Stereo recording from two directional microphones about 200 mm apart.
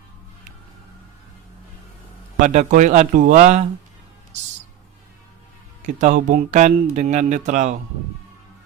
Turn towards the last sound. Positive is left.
turn(degrees=-35)  # may be behind; listen again after turning